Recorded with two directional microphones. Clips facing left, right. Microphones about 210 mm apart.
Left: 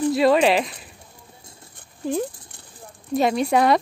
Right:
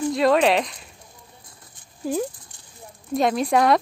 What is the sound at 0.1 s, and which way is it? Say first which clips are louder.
Speech: even; centre (ahead or behind).